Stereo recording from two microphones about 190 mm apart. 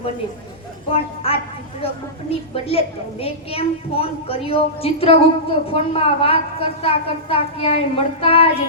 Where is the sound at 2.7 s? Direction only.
30° left (ahead or behind).